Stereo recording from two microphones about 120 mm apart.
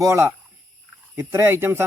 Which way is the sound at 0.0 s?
25° right (ahead or behind).